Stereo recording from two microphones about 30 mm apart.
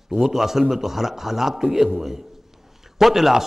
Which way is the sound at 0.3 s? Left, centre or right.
Centre.